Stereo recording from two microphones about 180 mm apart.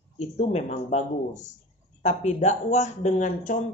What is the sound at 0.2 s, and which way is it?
Speech, 40° left (ahead or behind).